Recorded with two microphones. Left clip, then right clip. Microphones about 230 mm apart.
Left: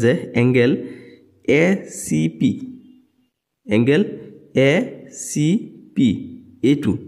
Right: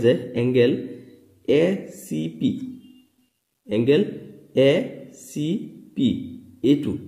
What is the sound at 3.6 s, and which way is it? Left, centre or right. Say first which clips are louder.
A man's voice: left 2 dB; left.